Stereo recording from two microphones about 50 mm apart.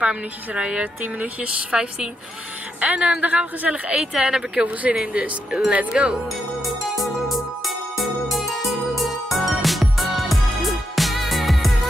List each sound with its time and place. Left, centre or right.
0.0 s speech: right
1.0 s speech: right
2.8 s speech: right
4.3 s speech: centre
6.6 s music: centre